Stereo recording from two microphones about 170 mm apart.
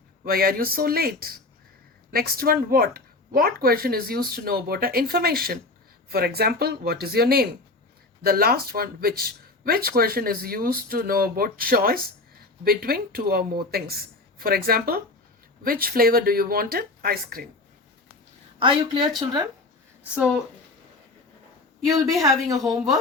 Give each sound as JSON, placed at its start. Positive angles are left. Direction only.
{"t": 0.3, "sound": "speech", "side_deg": -60}
{"t": 18.6, "sound": "speech", "side_deg": -30}
{"t": 20.1, "sound": "speech", "side_deg": -5}
{"t": 22.2, "sound": "speech", "side_deg": -20}